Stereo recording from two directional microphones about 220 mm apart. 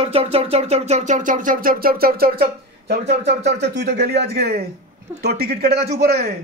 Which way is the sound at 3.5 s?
50° right (ahead or behind).